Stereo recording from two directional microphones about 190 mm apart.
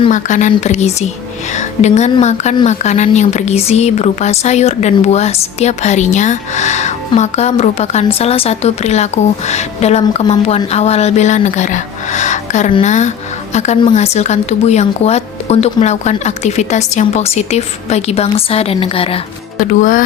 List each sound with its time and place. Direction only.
0.1 s speech: 40° left (ahead or behind)
19.5 s speech: 45° left (ahead or behind)